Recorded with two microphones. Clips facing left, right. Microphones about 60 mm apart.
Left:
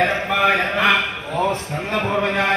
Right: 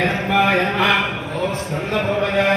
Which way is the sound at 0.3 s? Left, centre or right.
Centre.